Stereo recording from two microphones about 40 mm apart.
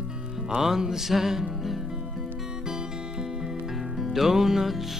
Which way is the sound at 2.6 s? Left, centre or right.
Centre.